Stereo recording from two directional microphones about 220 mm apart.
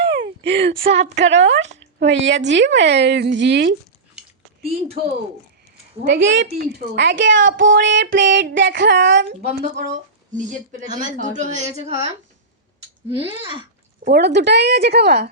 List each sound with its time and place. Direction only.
0.2 s a sound: 25° right (ahead or behind)
1.1 s a woman's voice: 55° right (ahead or behind)
4.6 s speech: 30° right (ahead or behind)
5.7 s a woman's voice: 60° right (ahead or behind)
9.4 s a woman's voice: 35° right (ahead or behind)
13.1 s speech: 25° left (ahead or behind)
14.0 s a woman's voice: 45° right (ahead or behind)